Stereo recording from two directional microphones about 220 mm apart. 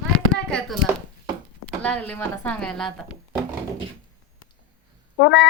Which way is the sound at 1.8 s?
5° left (ahead or behind).